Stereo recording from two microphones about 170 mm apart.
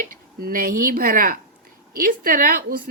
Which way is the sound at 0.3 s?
60° right (ahead or behind).